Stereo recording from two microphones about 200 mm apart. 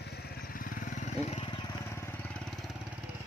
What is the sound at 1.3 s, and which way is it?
Vehicle, 25° left (ahead or behind).